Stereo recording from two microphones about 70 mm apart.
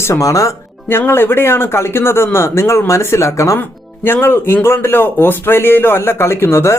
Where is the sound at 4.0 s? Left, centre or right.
Left.